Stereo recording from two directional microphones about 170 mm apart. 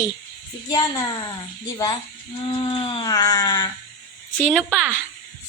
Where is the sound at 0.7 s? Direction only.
25° left (ahead or behind).